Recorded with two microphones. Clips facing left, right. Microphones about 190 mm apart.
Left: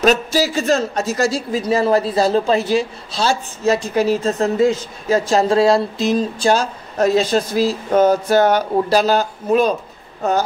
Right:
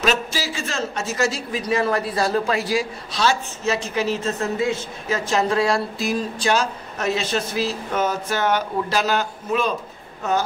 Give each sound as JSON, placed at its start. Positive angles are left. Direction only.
{"t": 0.0, "sound": "a man's voice", "side_deg": 40}
{"t": 6.5, "sound": "a man's voice", "side_deg": 35}